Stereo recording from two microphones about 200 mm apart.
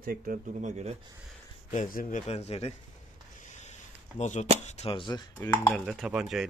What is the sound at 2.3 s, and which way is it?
Speech, 30° left (ahead or behind).